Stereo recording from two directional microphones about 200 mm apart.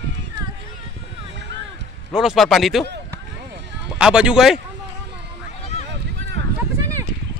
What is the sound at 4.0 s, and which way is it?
Speech, 5° right (ahead or behind).